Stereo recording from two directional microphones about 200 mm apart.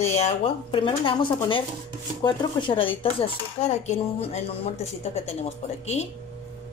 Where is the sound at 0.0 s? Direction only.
35° left (ahead or behind).